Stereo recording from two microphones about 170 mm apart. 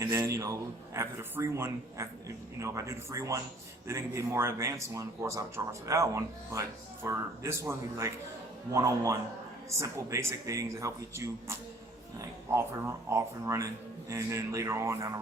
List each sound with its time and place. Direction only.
0.0 s a man's voice: 20° right (ahead or behind)
13.1 s speech: 15° right (ahead or behind)